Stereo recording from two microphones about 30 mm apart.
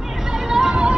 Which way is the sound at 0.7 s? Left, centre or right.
Right.